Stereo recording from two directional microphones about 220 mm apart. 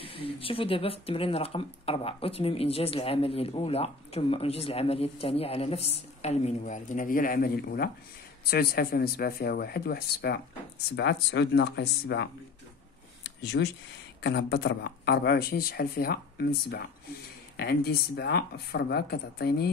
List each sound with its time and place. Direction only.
0.0 s speech: 25° left (ahead or behind); by 12.3 s 50° left (ahead or behind)
13.4 s speech: 50° left (ahead or behind)